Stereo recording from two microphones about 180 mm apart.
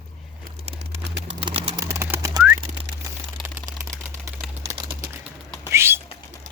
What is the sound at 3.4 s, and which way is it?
Typewriter, centre (ahead or behind).